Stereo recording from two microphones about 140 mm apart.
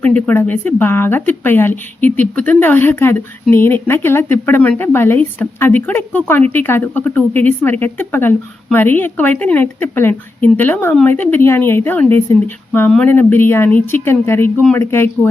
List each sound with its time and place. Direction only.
0.0 s speech: 10° left (ahead or behind)